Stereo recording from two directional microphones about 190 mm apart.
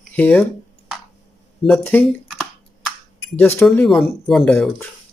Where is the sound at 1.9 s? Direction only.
10° left (ahead or behind).